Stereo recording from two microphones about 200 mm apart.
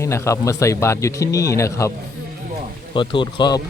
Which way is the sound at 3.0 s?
25° left (ahead or behind).